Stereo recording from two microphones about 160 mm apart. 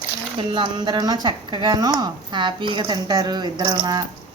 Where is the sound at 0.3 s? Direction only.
30° right (ahead or behind).